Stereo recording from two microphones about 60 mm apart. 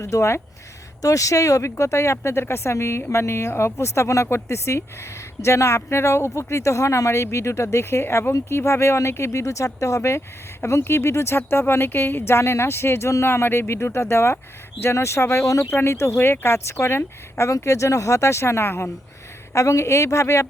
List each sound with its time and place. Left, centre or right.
0.0 s speech: left
1.0 s speech: left
1.7 s speech: left
15.7 s speech: left
19.5 s speech: left